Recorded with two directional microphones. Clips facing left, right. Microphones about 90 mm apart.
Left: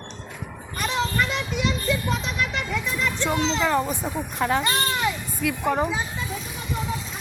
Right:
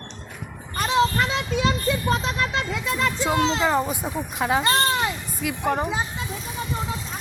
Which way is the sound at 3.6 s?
10° right (ahead or behind).